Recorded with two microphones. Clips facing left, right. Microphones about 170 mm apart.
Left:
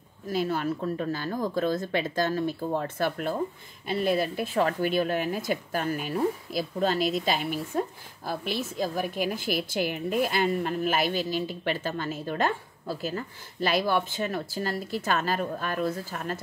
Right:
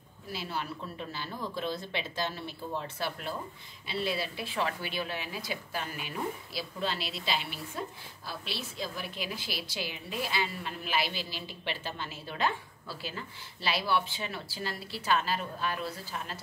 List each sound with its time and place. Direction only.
0.3 s a woman's voice: 45° left (ahead or behind)